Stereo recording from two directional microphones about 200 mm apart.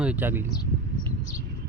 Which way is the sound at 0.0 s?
5° right (ahead or behind).